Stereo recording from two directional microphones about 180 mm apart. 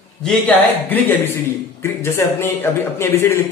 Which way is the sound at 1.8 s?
15° left (ahead or behind).